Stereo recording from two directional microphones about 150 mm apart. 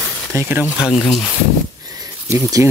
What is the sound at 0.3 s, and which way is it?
Speech, 15° right (ahead or behind).